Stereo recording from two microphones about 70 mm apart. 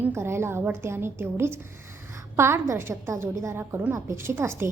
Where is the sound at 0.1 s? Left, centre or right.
Right.